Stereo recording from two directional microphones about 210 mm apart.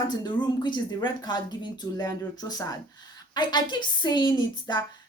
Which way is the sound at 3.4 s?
20° left (ahead or behind).